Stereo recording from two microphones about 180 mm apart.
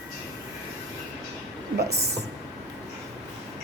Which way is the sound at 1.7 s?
65° right (ahead or behind).